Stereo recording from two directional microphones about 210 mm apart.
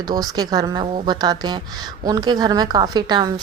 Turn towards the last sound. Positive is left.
turn(degrees=-20)  # may be behind; listen again after turning